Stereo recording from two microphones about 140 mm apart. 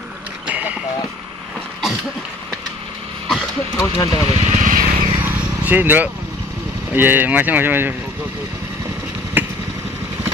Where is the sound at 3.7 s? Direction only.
20° left (ahead or behind).